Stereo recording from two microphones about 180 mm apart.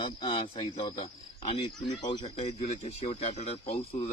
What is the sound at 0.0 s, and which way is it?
Speech, 30° left (ahead or behind).